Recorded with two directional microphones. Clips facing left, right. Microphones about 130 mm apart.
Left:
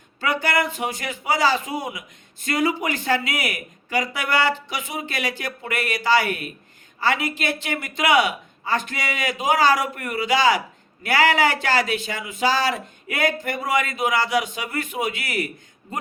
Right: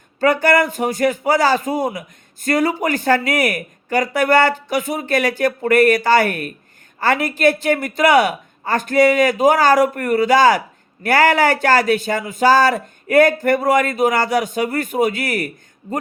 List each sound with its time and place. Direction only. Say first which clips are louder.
0.2 s a man's voice: right 8 dB; 50° right (ahead or behind)